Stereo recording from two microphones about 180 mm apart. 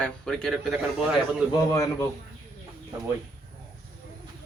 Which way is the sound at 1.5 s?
20° left (ahead or behind).